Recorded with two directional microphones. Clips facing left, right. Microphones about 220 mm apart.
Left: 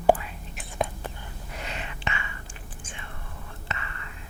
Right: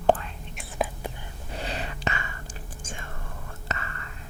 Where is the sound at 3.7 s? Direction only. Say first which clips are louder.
Right 3 dB; 40° right (ahead or behind).